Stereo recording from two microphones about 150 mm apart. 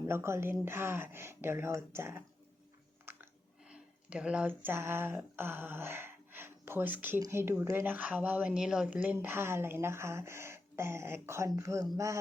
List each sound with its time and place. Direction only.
0.0 s speech: 15° right (ahead or behind)
3.1 s a sound: 15° right (ahead or behind)
3.7 s a man's voice: 5° right (ahead or behind)